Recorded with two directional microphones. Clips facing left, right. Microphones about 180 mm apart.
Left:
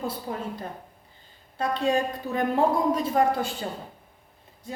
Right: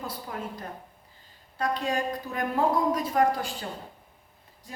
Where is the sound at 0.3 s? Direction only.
30° left (ahead or behind).